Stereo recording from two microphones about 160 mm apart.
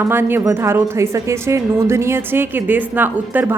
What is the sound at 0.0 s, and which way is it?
A woman's voice, 15° right (ahead or behind).